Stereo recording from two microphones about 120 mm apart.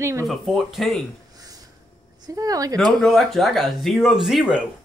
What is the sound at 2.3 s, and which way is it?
Speech, 30° right (ahead or behind).